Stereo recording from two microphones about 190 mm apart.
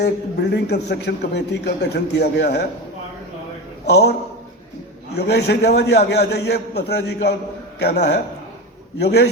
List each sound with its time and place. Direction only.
0.5 s a man's voice: 65° left (ahead or behind)
3.8 s a man's voice: 60° left (ahead or behind)
5.1 s a man's voice: 60° left (ahead or behind)